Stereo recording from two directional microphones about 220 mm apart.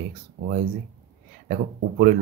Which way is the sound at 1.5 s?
40° right (ahead or behind).